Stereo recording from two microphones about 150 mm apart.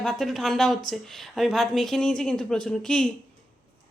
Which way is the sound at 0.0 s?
Centre (ahead or behind).